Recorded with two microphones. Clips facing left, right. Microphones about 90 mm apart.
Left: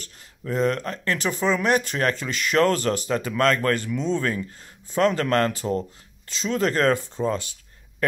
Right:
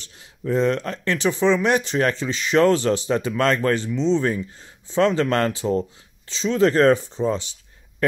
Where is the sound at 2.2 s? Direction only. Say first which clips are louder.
Right 3 dB; 10° right (ahead or behind).